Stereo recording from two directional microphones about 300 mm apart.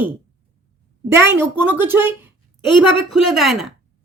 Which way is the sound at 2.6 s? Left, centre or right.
Centre.